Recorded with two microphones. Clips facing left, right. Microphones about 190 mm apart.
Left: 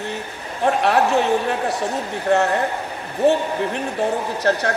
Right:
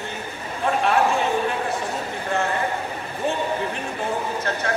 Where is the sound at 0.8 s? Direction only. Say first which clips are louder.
Left 2 dB; 70° left (ahead or behind).